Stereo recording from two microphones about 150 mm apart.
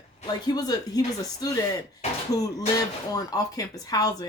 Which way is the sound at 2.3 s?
25° left (ahead or behind).